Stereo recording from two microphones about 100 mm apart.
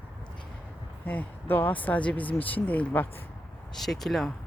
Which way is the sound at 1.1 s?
20° left (ahead or behind).